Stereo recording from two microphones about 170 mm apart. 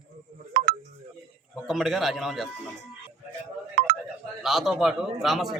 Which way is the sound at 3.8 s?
65° right (ahead or behind).